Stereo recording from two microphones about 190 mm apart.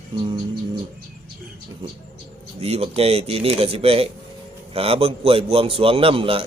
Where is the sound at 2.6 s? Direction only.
30° right (ahead or behind).